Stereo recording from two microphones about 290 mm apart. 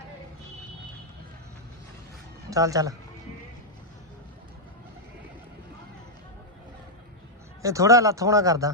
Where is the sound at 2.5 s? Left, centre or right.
Centre.